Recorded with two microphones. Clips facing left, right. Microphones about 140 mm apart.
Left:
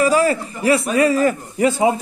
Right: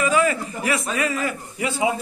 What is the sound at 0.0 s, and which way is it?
Speech, 35° left (ahead or behind).